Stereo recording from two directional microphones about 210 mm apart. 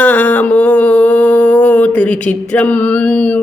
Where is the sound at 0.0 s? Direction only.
5° left (ahead or behind).